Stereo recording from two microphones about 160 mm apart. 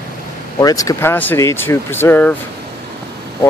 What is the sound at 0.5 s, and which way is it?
Speech, 20° left (ahead or behind).